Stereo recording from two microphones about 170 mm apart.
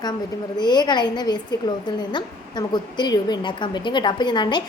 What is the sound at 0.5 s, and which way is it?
A woman's voice, 25° left (ahead or behind).